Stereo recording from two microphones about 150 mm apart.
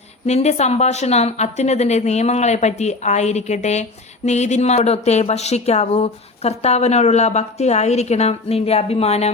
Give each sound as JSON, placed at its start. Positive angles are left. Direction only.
{"t": 0.3, "sound": "speech", "side_deg": 45}